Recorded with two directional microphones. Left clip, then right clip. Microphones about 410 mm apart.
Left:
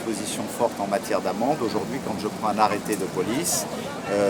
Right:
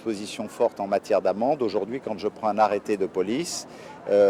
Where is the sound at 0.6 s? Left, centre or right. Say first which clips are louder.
Right 1 dB; left.